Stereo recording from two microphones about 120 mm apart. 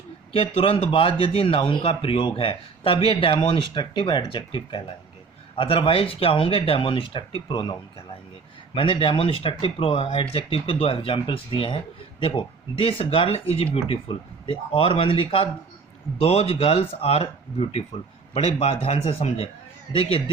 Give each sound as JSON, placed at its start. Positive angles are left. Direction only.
{"t": 0.3, "sound": "speech", "side_deg": 50}